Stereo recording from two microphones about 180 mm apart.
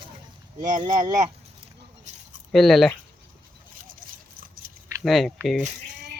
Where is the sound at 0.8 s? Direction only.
20° right (ahead or behind).